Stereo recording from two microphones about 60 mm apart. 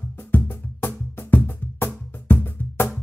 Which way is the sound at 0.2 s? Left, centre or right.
Left.